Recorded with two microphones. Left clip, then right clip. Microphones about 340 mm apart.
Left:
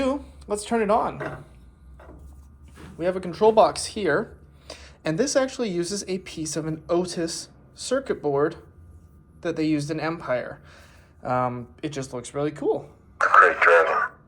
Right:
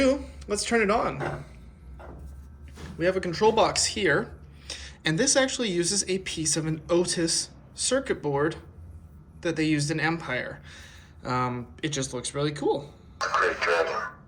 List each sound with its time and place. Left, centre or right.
0.0 s a woman's voice: centre
3.0 s speech: centre
13.1 s speech: left